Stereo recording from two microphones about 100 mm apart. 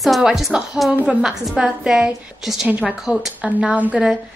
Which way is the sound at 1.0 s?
5° right (ahead or behind).